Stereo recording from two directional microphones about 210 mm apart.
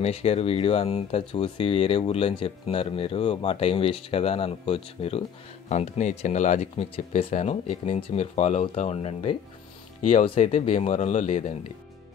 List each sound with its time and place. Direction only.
0.0 s speech: 30° left (ahead or behind)